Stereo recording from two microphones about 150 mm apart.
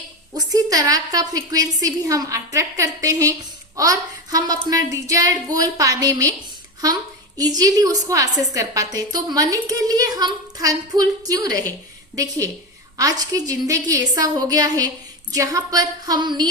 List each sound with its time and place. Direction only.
0.3 s a woman's voice: 25° right (ahead or behind)
7.3 s a woman's voice: 25° right (ahead or behind)